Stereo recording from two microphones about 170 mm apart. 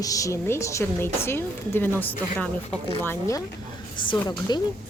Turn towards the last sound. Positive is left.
turn(degrees=25)  # may be behind; listen again after turning